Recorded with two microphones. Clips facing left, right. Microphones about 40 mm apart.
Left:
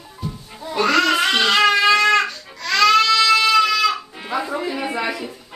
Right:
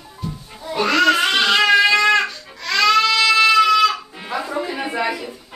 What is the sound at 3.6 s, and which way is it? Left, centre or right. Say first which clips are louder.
Music: right 3 dB; centre.